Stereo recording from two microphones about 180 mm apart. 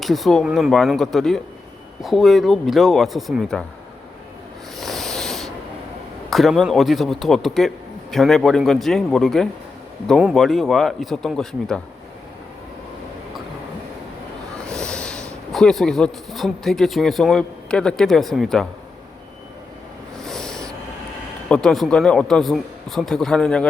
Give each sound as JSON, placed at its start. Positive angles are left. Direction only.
{"t": 0.0, "sound": "speech", "side_deg": 0}
{"t": 4.8, "sound": "rub", "side_deg": 0}
{"t": 6.3, "sound": "speech", "side_deg": 0}
{"t": 14.6, "sound": "speech", "side_deg": 5}
{"t": 20.1, "sound": "a sound", "side_deg": 0}
{"t": 21.5, "sound": "speech", "side_deg": 5}